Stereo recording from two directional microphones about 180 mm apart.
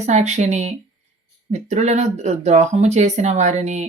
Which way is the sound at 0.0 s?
40° right (ahead or behind).